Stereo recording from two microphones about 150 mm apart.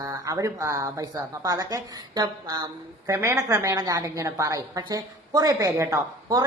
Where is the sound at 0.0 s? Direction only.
20° right (ahead or behind).